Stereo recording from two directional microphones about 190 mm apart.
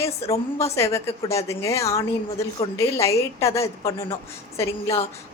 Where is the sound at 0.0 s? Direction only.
15° left (ahead or behind).